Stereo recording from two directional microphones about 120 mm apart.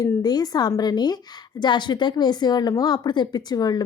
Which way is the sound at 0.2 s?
35° left (ahead or behind).